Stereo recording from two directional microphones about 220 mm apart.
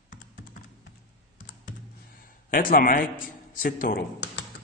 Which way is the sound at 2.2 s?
40° left (ahead or behind).